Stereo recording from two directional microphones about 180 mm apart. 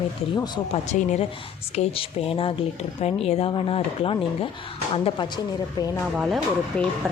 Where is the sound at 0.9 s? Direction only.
40° left (ahead or behind); by 5.9 s 25° left (ahead or behind).